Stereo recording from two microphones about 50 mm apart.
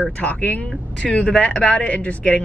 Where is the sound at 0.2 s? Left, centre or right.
Left.